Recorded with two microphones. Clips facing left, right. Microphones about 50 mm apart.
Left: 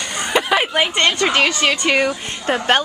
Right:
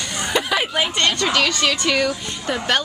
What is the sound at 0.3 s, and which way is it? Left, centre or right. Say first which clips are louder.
A woman's voice: left 4 dB; left.